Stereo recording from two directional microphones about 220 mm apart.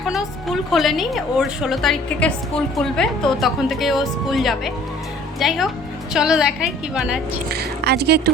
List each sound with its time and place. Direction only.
0.0 s speech: centre (ahead or behind)
7.5 s speech: 45° right (ahead or behind)